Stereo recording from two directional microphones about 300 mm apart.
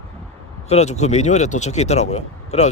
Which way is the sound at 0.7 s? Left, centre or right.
Left.